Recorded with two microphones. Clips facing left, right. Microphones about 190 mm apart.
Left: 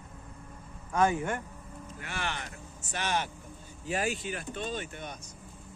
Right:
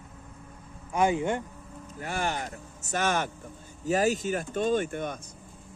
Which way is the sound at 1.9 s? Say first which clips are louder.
Right 7 dB; 40° right (ahead or behind).